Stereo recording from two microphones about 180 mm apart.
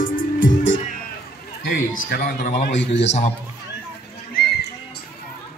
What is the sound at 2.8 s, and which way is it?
Speech, 75° left (ahead or behind).